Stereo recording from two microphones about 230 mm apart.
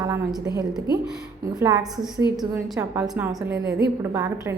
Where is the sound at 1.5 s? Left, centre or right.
Centre.